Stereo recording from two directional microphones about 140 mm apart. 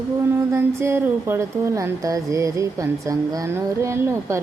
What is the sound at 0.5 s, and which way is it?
Speech, 20° right (ahead or behind).